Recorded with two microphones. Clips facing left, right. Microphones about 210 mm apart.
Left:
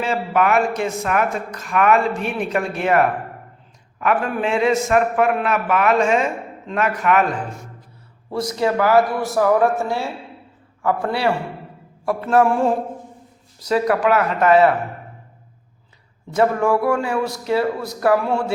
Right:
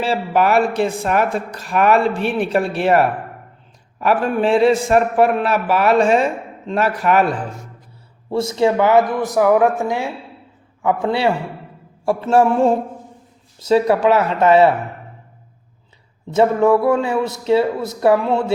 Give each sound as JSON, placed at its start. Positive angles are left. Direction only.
{"t": 0.0, "sound": "a man's voice", "side_deg": -30}
{"t": 16.3, "sound": "a man's voice", "side_deg": -25}